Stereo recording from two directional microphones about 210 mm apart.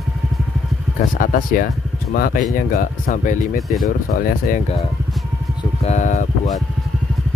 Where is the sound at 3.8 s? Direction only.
40° left (ahead or behind).